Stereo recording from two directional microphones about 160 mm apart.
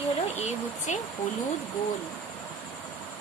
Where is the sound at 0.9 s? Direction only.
50° left (ahead or behind).